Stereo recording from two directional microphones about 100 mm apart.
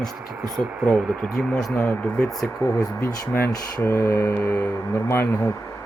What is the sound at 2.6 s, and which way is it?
Speech, 30° left (ahead or behind).